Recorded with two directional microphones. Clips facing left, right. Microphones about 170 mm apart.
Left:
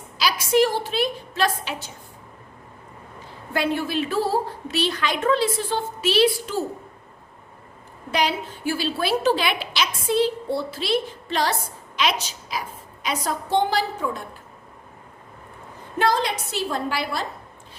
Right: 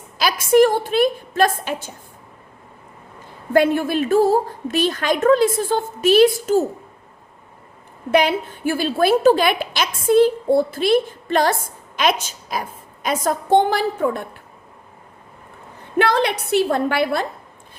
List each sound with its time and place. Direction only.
0.2 s a woman's voice: 50° right (ahead or behind)
3.5 s a woman's voice: 50° right (ahead or behind)
8.1 s a woman's voice: 55° right (ahead or behind)
16.0 s a woman's voice: 65° right (ahead or behind)